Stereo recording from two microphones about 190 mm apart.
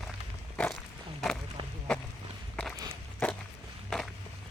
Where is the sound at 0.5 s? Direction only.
5° left (ahead or behind).